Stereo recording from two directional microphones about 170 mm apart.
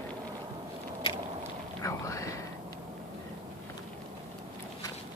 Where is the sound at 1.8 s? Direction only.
20° left (ahead or behind).